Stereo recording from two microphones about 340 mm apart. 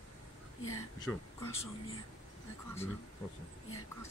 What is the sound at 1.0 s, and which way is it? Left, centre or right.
Speech, centre.